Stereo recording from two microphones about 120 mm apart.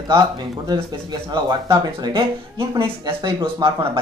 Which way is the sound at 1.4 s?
35° right (ahead or behind).